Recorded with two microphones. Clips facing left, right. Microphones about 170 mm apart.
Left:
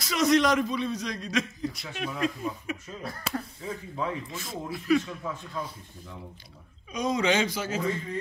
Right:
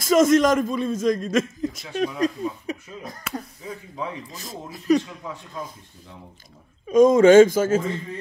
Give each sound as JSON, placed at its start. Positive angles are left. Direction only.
{"t": 0.0, "sound": "a man's voice", "side_deg": -45}
{"t": 3.3, "sound": "speech", "side_deg": 35}
{"t": 4.3, "sound": "speech", "side_deg": -40}
{"t": 6.9, "sound": "a man's voice", "side_deg": -50}